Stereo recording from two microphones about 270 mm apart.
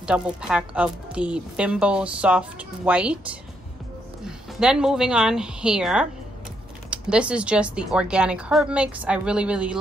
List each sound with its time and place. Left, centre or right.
0.0 s speech: centre
4.2 s a woman's voice: centre